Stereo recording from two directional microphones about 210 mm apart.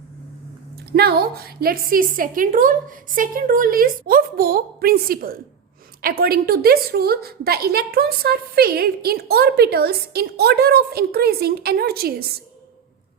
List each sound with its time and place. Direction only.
0.9 s a woman's voice: 50° right (ahead or behind)